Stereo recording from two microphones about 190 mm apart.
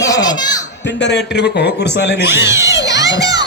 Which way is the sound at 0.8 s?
65° left (ahead or behind).